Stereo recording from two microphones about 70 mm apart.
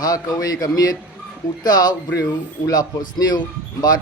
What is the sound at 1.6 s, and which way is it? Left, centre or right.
Speech, left.